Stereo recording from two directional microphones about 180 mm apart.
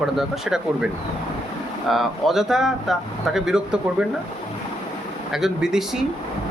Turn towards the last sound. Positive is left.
turn(degrees=-5)  # may be behind; listen again after turning